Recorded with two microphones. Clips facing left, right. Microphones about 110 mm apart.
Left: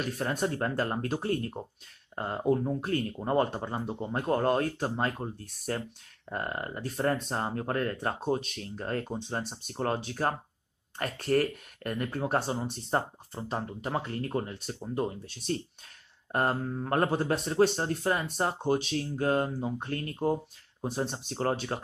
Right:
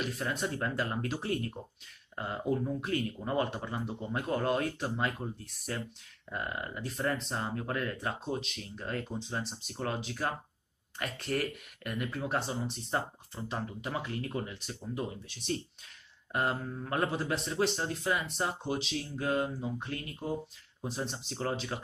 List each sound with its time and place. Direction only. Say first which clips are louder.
0.0 s speech: left 4 dB; 45° left (ahead or behind)